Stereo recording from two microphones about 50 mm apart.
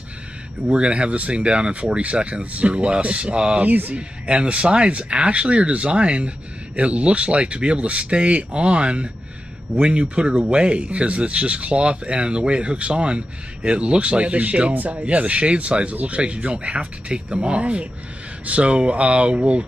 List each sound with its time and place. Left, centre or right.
0.7 s speech: right